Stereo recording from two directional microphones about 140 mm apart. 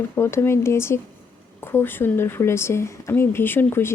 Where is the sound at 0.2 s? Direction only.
20° left (ahead or behind).